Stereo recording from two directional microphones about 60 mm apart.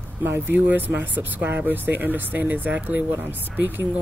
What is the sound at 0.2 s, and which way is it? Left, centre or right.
Speech, right.